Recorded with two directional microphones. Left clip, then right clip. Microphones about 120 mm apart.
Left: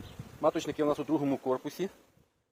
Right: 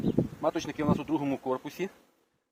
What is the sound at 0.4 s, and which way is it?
Speech, 25° left (ahead or behind).